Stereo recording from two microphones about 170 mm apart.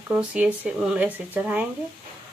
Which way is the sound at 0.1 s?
5° right (ahead or behind).